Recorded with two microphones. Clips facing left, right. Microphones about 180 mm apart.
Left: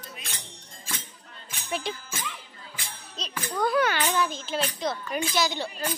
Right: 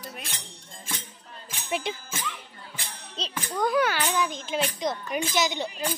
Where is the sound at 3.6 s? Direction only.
15° right (ahead or behind).